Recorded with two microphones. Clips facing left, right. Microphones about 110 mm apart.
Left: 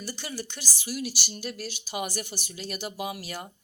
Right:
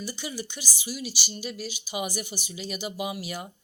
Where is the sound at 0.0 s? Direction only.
Centre (ahead or behind).